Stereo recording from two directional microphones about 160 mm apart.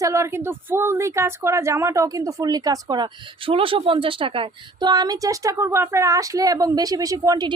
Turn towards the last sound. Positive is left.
turn(degrees=-25)  # may be behind; listen again after turning